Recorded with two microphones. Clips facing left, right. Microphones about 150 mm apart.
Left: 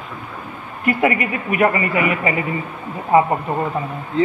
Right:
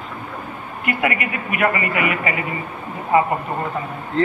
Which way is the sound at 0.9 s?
30° left (ahead or behind).